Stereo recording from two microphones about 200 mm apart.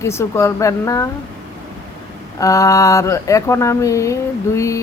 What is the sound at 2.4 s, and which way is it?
Speech, 15° left (ahead or behind).